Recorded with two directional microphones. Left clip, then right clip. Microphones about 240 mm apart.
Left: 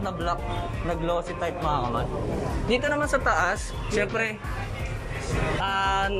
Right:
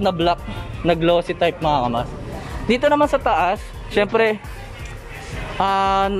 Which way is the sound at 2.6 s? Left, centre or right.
Right.